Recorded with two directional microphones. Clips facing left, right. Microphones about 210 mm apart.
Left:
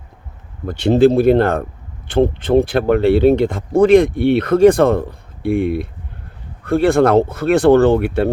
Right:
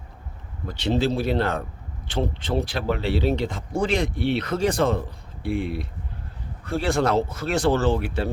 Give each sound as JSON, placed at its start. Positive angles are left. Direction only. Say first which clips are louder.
{"t": 0.7, "sound": "speech", "louder": "left 11 dB", "side_deg": 50}